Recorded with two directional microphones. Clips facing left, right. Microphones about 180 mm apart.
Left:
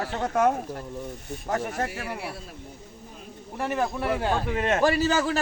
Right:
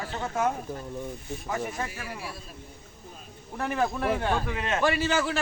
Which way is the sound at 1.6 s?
65° left (ahead or behind).